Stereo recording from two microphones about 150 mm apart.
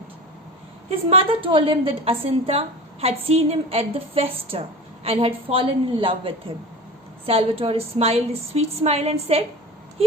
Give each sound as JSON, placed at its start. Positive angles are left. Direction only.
{"t": 0.9, "sound": "a woman's voice", "side_deg": -40}